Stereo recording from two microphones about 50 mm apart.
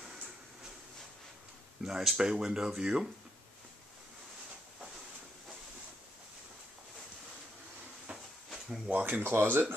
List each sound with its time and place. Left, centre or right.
1.8 s speech: centre
8.1 s a sound: right
8.8 s speech: right
9.2 s speech: right